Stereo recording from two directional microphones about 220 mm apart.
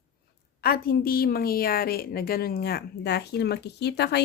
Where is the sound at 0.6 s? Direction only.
45° left (ahead or behind).